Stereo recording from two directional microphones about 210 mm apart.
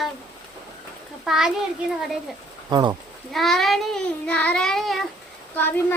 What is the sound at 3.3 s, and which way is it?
Child singing, centre (ahead or behind).